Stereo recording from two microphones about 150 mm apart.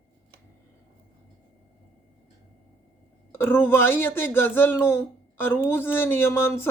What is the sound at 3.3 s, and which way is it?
Speech, 15° left (ahead or behind).